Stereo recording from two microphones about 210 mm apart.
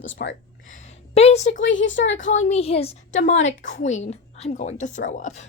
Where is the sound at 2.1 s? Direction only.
35° left (ahead or behind).